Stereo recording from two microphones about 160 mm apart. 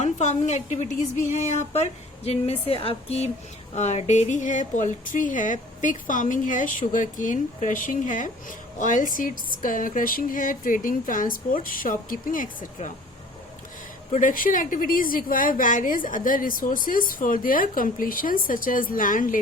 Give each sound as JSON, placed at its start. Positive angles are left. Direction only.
{"t": 0.0, "sound": "a woman's voice", "side_deg": 45}
{"t": 14.1, "sound": "a woman's voice", "side_deg": 55}